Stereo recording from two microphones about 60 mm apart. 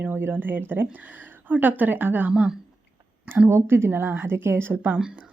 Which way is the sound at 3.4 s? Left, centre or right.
Right.